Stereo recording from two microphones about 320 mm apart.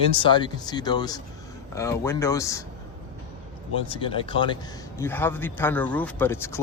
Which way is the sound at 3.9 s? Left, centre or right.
Centre.